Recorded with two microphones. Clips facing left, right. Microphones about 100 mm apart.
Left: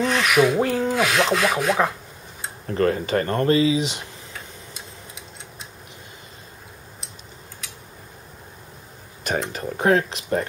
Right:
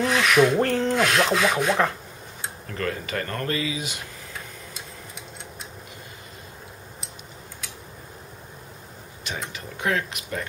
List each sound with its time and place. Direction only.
0.0 s rub: centre (ahead or behind)
2.6 s speech: 35° left (ahead or behind)
9.5 s speech: 40° left (ahead or behind)